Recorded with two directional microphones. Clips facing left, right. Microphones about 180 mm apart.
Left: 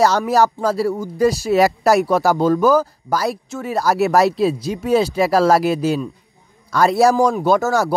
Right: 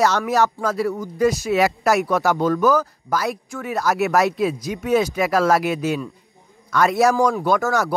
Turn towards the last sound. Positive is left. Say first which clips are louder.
# left 3 dB
turn(degrees=30)  # may be behind; listen again after turning